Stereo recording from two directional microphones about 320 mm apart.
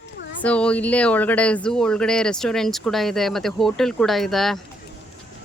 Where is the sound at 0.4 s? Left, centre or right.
Centre.